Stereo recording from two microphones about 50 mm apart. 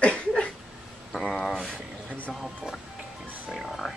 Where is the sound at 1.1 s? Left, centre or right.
Centre.